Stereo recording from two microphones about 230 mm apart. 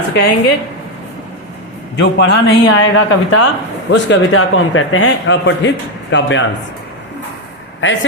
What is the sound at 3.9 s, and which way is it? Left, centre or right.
A man's voice, left.